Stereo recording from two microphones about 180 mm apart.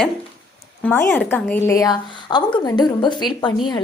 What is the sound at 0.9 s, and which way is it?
A woman's voice, 10° left (ahead or behind).